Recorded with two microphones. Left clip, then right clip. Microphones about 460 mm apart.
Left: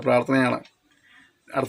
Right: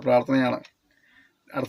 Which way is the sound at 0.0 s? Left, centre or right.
Right.